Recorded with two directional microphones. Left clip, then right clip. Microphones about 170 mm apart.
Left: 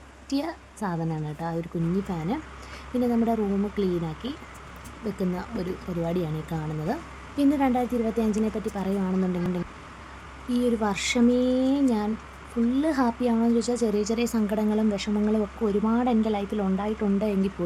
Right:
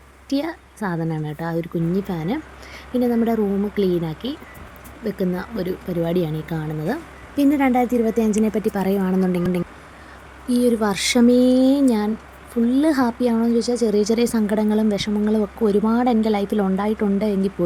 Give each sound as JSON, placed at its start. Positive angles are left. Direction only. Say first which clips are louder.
{"t": 0.3, "sound": "a woman's voice", "louder": "right 5 dB", "side_deg": -15}